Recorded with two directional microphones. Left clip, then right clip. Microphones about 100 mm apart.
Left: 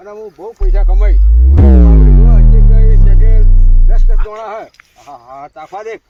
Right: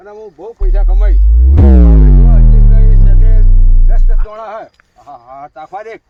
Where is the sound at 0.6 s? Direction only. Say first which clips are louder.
Left 4 dB; 60° right (ahead or behind).